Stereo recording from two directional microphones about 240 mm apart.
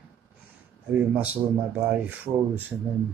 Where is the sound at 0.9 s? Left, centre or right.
Centre.